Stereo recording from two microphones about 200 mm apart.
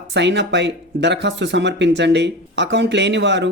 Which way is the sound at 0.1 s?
60° right (ahead or behind).